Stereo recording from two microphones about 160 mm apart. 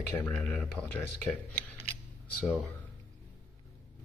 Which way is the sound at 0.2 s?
10° left (ahead or behind).